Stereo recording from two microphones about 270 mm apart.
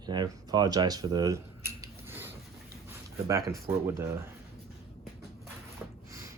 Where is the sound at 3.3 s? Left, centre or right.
Right.